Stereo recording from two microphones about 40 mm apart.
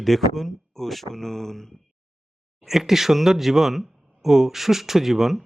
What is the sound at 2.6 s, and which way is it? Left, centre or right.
Speech, centre.